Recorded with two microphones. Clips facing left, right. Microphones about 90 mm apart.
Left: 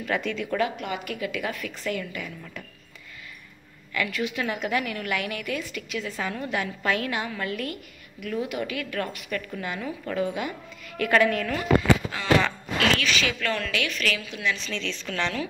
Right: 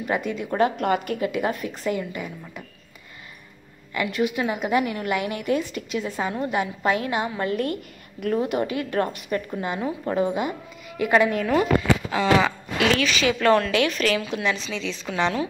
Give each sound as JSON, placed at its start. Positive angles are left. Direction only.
{"t": 0.0, "sound": "a woman's voice", "side_deg": -15}
{"t": 0.5, "sound": "a woman's voice", "side_deg": -40}
{"t": 3.9, "sound": "a woman's voice", "side_deg": -20}
{"t": 13.0, "sound": "a woman's voice", "side_deg": -25}
{"t": 14.6, "sound": "a woman's voice", "side_deg": -10}